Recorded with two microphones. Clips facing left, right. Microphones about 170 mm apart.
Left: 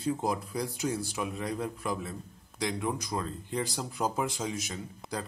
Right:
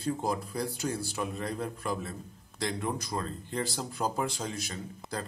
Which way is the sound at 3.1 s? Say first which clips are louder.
Left 1 dB; 15° left (ahead or behind).